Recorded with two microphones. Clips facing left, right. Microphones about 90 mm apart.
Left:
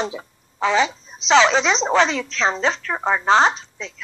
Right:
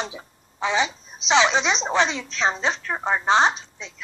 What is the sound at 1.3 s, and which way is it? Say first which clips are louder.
A woman's voice: left 4 dB; 35° left (ahead or behind).